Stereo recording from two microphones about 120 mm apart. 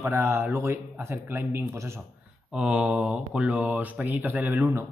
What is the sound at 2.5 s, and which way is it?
Speech, 10° right (ahead or behind).